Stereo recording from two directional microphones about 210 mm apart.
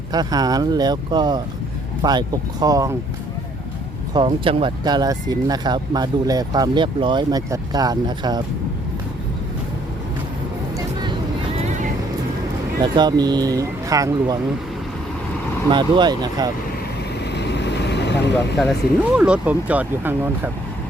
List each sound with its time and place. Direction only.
0.1 s speech: 20° right (ahead or behind)
4.1 s speech: 25° right (ahead or behind)
12.8 s speech: 20° right (ahead or behind)
15.7 s speech: 20° right (ahead or behind)
17.3 s vehicle: 55° left (ahead or behind)
18.6 s speech: centre (ahead or behind)